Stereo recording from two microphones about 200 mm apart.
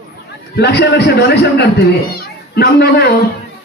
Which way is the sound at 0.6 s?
55° left (ahead or behind).